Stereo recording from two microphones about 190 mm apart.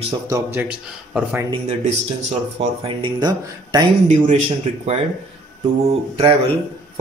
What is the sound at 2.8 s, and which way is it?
Speech, 25° right (ahead or behind).